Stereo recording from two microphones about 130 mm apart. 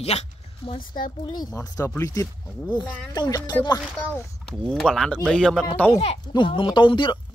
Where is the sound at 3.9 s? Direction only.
20° left (ahead or behind).